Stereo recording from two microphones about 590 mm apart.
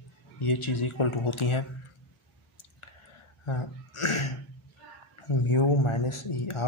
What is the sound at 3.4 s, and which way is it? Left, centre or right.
Speech, left.